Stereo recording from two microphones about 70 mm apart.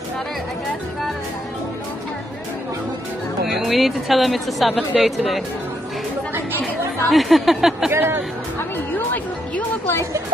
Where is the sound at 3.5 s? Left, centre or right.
Centre.